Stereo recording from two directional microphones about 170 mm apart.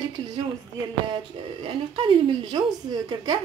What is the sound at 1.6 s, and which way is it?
Speech, 30° right (ahead or behind).